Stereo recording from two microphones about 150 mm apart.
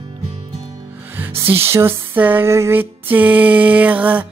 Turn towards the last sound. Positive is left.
turn(degrees=-10)  # may be behind; listen again after turning